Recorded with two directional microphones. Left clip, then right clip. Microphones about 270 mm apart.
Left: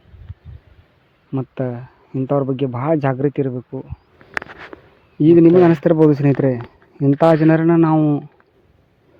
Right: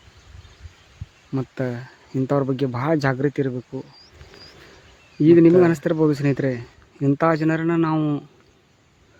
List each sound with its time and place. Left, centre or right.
1.3 s speech: centre
5.2 s a man's voice: centre
5.7 s a man's voice: left